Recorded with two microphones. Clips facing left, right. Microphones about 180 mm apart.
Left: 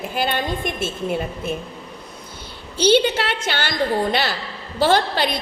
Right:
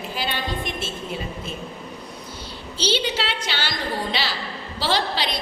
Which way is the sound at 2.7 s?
50° left (ahead or behind).